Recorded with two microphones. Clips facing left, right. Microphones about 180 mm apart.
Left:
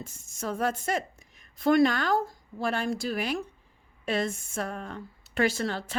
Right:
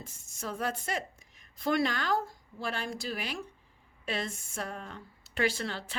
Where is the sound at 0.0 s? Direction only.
45° left (ahead or behind).